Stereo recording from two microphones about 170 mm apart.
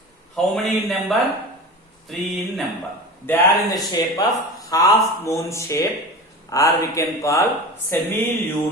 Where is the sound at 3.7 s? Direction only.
25° left (ahead or behind).